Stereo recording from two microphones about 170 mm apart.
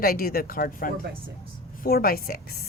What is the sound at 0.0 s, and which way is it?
Speech, 60° left (ahead or behind).